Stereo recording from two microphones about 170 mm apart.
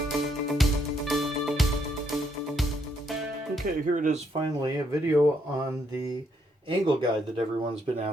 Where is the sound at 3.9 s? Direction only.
50° right (ahead or behind).